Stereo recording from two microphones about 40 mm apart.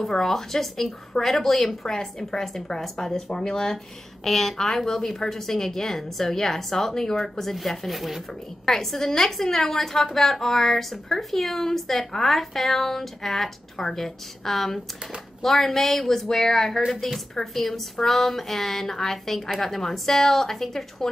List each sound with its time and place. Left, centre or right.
0.0 s a woman's voice: centre
8.6 s a woman's voice: centre
16.8 s a woman's voice: centre